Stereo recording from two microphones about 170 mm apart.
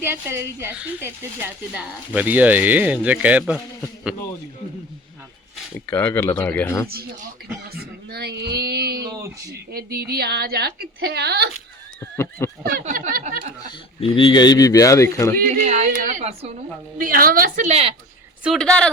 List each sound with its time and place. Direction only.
0.0 s speech: 15° right (ahead or behind)
5.7 s speech: 10° left (ahead or behind)
6.8 s a woman's voice: 60° right (ahead or behind)
9.0 s speech: 15° right (ahead or behind)
9.7 s a woman's voice: 65° right (ahead or behind)
11.9 s speech: 15° left (ahead or behind)
12.8 s speech: 55° right (ahead or behind)
14.0 s a man's voice: 30° left (ahead or behind)
15.4 s speech: 45° right (ahead or behind)
17.0 s a woman's voice: 55° right (ahead or behind)
17.7 s speech: 40° right (ahead or behind)
18.4 s speech: 5° left (ahead or behind)